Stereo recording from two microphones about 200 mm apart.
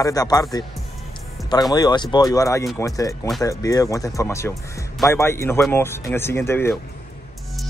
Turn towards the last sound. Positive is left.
turn(degrees=10)  # may be behind; listen again after turning